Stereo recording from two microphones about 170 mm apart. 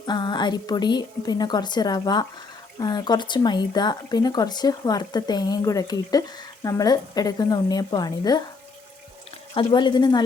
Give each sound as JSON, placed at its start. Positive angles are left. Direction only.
{"t": 0.0, "sound": "speech", "side_deg": 25}
{"t": 9.6, "sound": "speech", "side_deg": 25}